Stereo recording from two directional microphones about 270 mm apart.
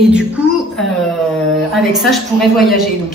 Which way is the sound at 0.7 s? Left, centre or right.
Centre.